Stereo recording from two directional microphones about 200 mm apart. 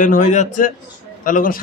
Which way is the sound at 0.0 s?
40° left (ahead or behind).